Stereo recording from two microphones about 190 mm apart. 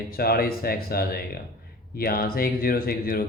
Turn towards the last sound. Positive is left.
turn(degrees=50)  # may be behind; listen again after turning